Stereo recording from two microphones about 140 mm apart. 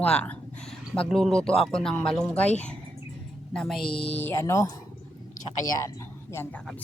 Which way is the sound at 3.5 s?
5° left (ahead or behind).